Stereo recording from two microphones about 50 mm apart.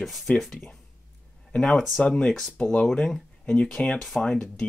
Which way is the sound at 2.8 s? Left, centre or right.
Centre.